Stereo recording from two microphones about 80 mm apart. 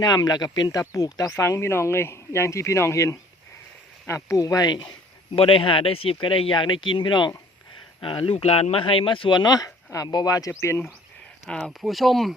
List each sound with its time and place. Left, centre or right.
0.0 s speech: left
0.8 s speech: left
5.3 s speech: left
8.0 s speech: left
10.1 s speech: left
10.6 s speech: left
11.4 s speech: centre
11.8 s speech: centre